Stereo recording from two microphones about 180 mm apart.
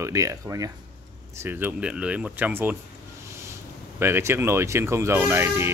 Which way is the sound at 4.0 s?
15° right (ahead or behind).